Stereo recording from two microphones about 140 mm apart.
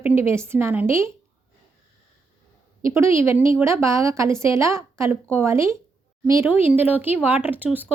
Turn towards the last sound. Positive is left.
turn(degrees=-15)  # may be behind; listen again after turning